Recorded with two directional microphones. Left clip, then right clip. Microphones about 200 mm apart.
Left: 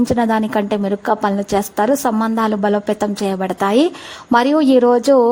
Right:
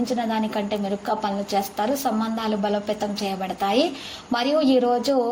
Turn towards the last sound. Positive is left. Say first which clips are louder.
# left 8 dB
turn(degrees=50)  # may be behind; listen again after turning